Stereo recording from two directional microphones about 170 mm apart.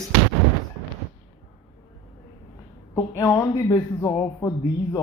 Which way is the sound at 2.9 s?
15° left (ahead or behind).